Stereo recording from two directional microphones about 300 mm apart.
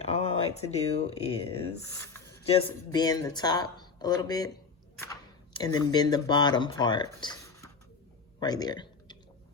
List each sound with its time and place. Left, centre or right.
0.0 s speech: centre
2.5 s speech: centre
5.5 s speech: centre
8.4 s a sound: centre